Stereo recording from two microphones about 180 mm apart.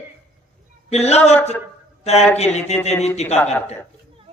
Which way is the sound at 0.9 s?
35° left (ahead or behind).